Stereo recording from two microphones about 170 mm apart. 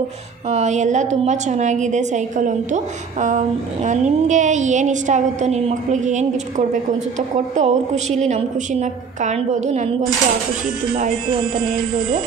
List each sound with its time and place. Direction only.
0.5 s a woman's voice: 45° right (ahead or behind)